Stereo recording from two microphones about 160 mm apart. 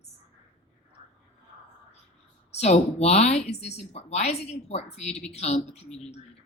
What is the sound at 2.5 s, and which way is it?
A woman's voice, 45° left (ahead or behind).